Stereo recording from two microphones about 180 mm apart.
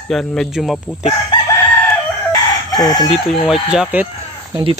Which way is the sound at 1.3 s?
25° left (ahead or behind).